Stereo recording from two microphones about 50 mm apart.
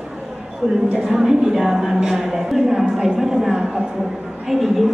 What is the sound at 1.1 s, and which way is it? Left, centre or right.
A woman's voice, centre.